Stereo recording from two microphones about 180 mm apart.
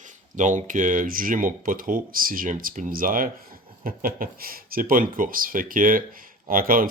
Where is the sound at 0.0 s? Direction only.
45° right (ahead or behind).